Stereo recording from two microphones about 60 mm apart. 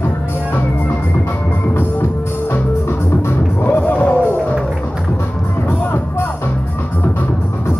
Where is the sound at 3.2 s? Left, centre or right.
Left.